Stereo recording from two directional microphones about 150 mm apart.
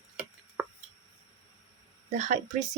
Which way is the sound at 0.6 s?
10° right (ahead or behind).